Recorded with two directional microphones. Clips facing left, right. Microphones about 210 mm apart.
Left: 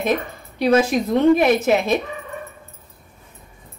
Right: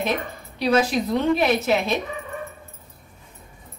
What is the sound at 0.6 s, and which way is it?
Speech, 50° left (ahead or behind).